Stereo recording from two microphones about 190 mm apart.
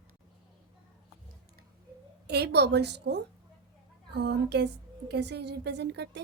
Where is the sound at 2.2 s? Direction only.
60° right (ahead or behind).